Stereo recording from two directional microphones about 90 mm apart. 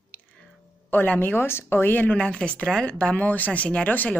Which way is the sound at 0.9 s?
20° left (ahead or behind).